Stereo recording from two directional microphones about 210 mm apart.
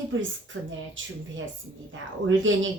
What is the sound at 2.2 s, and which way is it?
Speech, 65° right (ahead or behind).